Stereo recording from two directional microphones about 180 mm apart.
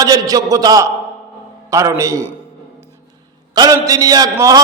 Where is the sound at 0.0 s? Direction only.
20° right (ahead or behind).